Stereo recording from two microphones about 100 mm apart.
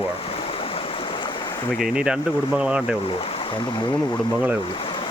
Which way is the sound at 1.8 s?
10° right (ahead or behind).